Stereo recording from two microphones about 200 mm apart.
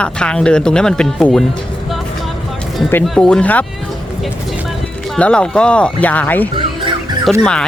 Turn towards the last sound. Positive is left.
turn(degrees=5)  # may be behind; listen again after turning